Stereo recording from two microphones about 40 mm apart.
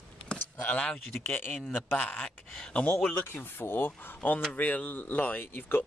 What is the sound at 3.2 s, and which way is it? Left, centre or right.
Speech, left.